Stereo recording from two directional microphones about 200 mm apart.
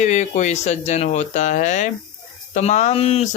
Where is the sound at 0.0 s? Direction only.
35° left (ahead or behind).